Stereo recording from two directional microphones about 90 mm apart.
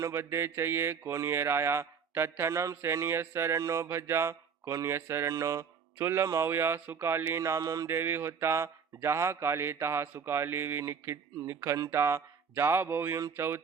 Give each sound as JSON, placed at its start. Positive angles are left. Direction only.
{"t": 0.0, "sound": "speech", "side_deg": -30}
{"t": 3.8, "sound": "mantra", "side_deg": -30}
{"t": 6.5, "sound": "speech", "side_deg": -30}
{"t": 7.9, "sound": "speech", "side_deg": -25}